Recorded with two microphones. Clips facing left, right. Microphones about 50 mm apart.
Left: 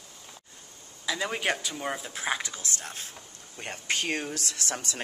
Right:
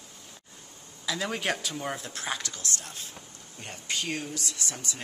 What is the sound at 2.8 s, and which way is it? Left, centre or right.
A woman's voice, left.